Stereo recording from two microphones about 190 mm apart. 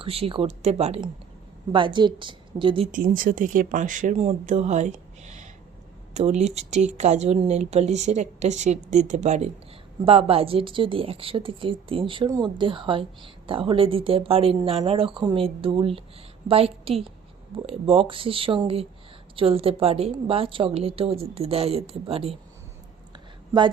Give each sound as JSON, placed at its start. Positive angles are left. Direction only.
{"t": 0.0, "sound": "a woman's voice", "side_deg": -30}
{"t": 2.9, "sound": "a woman's voice", "side_deg": -45}